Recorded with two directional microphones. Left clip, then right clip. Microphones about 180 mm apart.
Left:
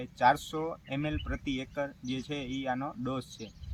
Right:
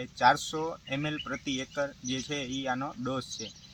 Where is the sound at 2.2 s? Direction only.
25° left (ahead or behind).